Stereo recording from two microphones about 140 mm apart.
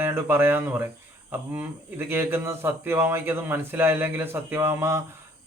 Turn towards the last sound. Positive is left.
turn(degrees=-20)  # may be behind; listen again after turning